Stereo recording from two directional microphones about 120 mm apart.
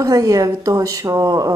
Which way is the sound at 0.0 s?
30° right (ahead or behind).